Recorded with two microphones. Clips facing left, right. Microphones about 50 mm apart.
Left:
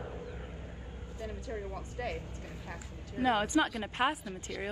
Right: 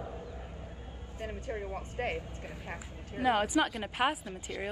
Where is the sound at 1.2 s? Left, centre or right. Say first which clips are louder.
Right 2 dB; right.